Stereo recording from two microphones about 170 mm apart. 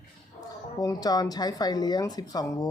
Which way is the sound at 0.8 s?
20° left (ahead or behind).